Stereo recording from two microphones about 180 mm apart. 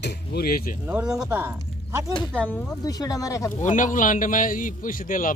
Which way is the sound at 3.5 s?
45° left (ahead or behind).